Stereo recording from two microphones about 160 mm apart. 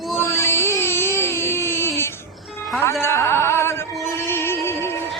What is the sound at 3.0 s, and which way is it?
Music, 15° left (ahead or behind).